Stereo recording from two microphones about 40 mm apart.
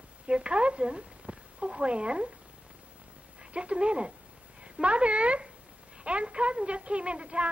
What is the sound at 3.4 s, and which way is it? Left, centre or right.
Speech, right.